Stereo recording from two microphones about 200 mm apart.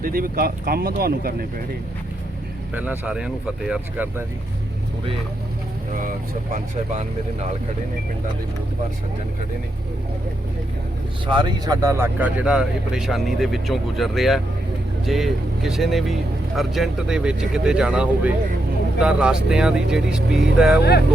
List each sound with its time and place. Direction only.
0.0 s speech: 45° right (ahead or behind)
2.7 s speech: 10° right (ahead or behind)
5.9 s speech: 45° right (ahead or behind)
11.3 s speech: 25° right (ahead or behind); by 20.8 s 5° right (ahead or behind)